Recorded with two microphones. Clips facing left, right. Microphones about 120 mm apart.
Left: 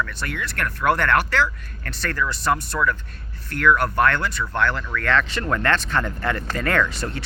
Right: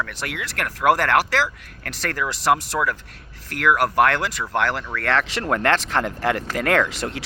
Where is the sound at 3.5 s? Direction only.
80° right.